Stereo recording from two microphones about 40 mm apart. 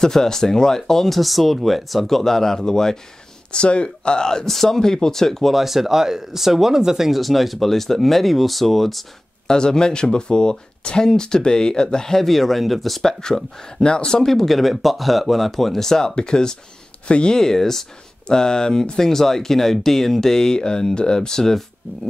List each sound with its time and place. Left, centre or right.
0.0 s speech: centre
3.5 s speech: left
4.5 s speech: centre
5.5 s speech: centre
9.5 s speech: centre
13.0 s speech: centre
14.2 s speech: centre